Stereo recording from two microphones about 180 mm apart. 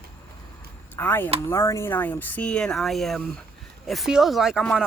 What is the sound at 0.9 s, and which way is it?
Speech, 10° left (ahead or behind).